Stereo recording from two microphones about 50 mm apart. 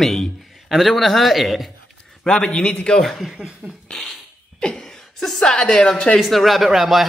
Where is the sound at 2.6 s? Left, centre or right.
Left.